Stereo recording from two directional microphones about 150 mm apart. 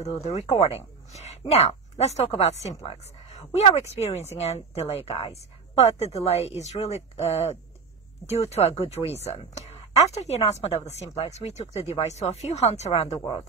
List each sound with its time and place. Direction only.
0.0 s speech: 45° left (ahead or behind)